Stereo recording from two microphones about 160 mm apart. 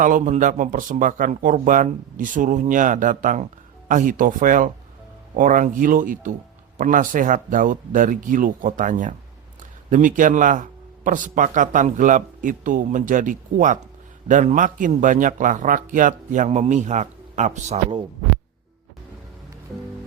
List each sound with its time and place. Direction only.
0.0 s a man's voice: 55° right (ahead or behind)